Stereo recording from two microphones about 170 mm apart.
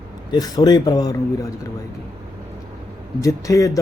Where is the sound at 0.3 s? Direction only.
20° left (ahead or behind).